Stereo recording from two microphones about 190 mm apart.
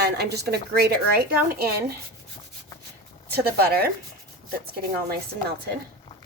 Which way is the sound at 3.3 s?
55° right (ahead or behind).